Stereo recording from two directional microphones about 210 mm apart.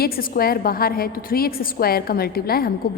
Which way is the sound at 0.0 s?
45° left (ahead or behind).